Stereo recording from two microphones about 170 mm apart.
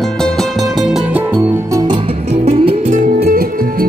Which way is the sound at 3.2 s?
60° right (ahead or behind).